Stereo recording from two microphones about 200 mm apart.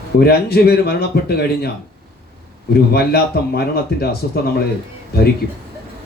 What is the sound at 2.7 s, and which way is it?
A man's voice, 50° left (ahead or behind).